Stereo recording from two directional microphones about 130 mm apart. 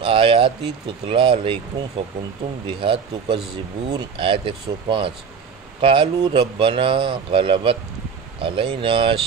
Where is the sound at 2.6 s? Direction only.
40° right (ahead or behind).